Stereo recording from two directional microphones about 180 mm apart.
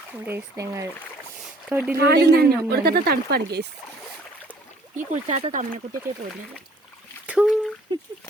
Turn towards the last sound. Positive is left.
turn(degrees=0)  # may be behind; listen again after turning